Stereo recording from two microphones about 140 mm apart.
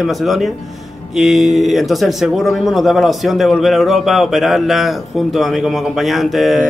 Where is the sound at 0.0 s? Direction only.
Centre (ahead or behind).